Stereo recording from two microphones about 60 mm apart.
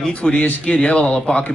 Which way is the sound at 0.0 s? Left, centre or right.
Centre.